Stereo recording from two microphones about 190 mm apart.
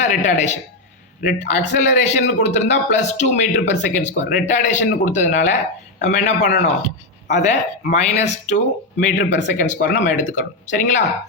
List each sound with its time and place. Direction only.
0.0 s speech: 40° left (ahead or behind)